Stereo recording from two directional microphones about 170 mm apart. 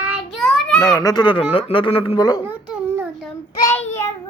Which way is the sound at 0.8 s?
15° left (ahead or behind).